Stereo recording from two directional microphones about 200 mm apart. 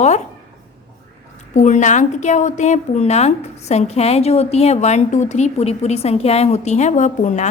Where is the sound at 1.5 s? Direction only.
35° left (ahead or behind).